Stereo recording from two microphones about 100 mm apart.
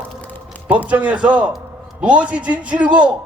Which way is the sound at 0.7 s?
15° right (ahead or behind).